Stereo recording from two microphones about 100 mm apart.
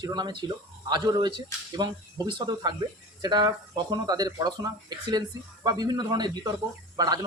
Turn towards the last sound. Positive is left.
turn(degrees=-40)  # may be behind; listen again after turning